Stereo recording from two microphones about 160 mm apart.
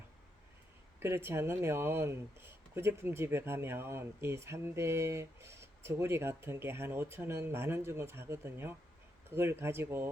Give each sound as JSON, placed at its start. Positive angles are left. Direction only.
{"t": 0.9, "sound": "speech", "side_deg": -15}